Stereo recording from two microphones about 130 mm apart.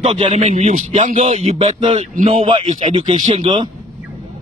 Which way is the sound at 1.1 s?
55° right (ahead or behind).